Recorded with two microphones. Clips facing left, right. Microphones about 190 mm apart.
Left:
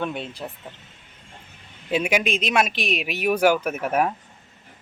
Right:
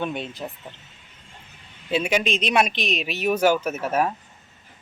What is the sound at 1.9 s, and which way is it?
Speech, 10° left (ahead or behind).